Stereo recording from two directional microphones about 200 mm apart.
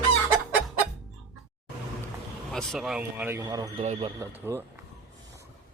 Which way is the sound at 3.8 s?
30° right (ahead or behind).